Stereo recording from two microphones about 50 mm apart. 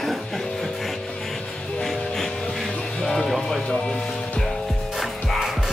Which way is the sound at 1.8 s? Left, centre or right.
Centre.